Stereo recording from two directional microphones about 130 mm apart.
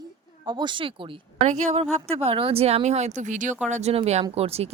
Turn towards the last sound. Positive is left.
turn(degrees=-50)  # may be behind; listen again after turning